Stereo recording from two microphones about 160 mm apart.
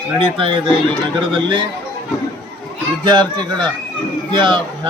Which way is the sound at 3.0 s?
25° right (ahead or behind).